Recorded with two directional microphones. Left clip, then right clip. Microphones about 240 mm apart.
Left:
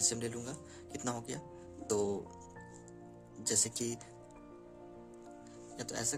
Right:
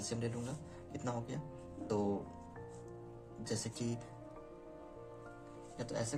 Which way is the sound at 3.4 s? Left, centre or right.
Left.